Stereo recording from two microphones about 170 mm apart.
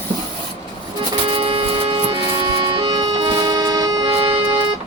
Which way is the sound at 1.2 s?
30° right (ahead or behind).